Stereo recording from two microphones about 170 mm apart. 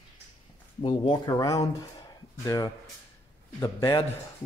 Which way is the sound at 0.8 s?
30° left (ahead or behind).